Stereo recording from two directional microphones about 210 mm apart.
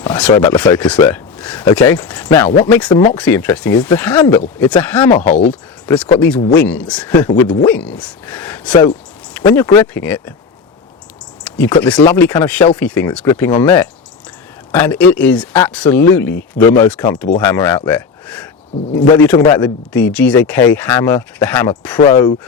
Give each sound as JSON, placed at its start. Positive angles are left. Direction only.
{"t": 0.0, "sound": "speech", "side_deg": 5}
{"t": 11.4, "sound": "a sound", "side_deg": 10}
{"t": 11.8, "sound": "speech", "side_deg": 5}
{"t": 14.7, "sound": "speech", "side_deg": 10}
{"t": 18.9, "sound": "speech", "side_deg": 20}
{"t": 19.6, "sound": "speech", "side_deg": 5}
{"t": 21.9, "sound": "speech", "side_deg": 25}